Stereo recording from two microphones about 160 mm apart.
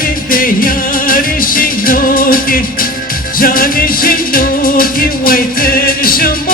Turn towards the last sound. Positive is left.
turn(degrees=65)  # may be behind; listen again after turning